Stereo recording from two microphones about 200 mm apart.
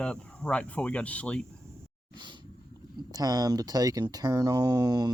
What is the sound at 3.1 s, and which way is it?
Speech, 20° right (ahead or behind).